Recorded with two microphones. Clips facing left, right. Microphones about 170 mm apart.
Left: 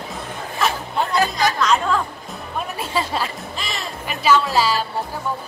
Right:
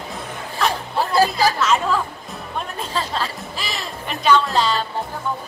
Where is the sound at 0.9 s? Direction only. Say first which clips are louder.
Right 4 dB; 35° right (ahead or behind).